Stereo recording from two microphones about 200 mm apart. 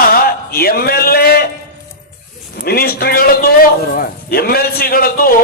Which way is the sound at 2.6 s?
50° left (ahead or behind).